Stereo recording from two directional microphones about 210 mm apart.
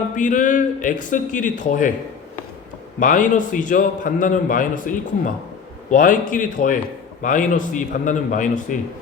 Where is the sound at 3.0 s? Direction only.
40° left (ahead or behind).